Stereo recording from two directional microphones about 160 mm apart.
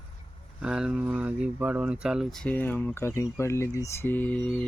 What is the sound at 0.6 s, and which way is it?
Speech, 5° right (ahead or behind).